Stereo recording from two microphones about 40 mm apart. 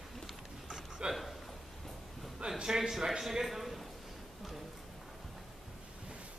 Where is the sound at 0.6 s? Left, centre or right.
Centre.